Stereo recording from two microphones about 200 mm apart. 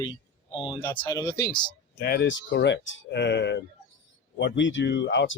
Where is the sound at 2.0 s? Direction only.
55° left (ahead or behind).